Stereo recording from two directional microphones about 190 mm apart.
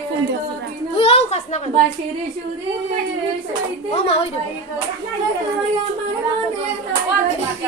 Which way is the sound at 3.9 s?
30° left (ahead or behind).